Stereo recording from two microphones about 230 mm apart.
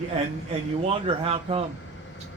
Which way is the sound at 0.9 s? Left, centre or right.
Right.